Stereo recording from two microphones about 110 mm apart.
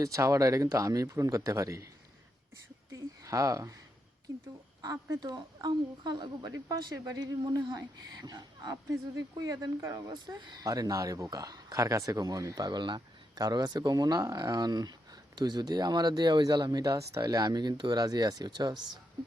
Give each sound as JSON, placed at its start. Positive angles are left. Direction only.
{"t": 0.0, "sound": "speech", "side_deg": -30}
{"t": 2.9, "sound": "a sound", "side_deg": -30}
{"t": 4.8, "sound": "speech", "side_deg": -35}
{"t": 10.1, "sound": "speech", "side_deg": -45}